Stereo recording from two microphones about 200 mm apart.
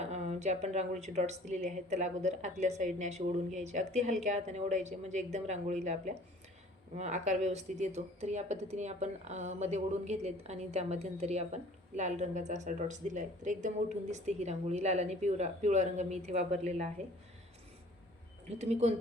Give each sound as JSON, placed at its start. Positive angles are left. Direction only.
{"t": 0.0, "sound": "speech", "side_deg": -35}
{"t": 18.6, "sound": "speech", "side_deg": -35}